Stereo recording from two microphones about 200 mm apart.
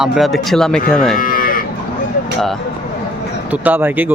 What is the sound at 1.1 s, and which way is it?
Moo, 45° left (ahead or behind).